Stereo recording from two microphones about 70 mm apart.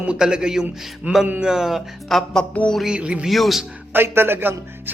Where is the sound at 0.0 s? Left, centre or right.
Centre.